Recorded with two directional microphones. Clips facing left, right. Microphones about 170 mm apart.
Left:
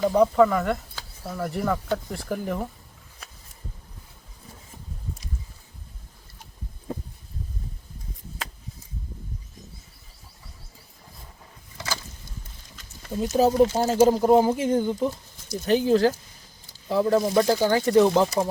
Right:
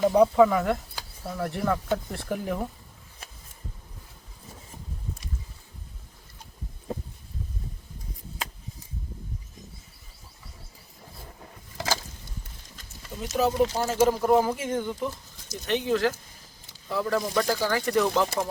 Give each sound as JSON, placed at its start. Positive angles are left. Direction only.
{"t": 0.0, "sound": "speech", "side_deg": -5}
{"t": 13.1, "sound": "speech", "side_deg": 35}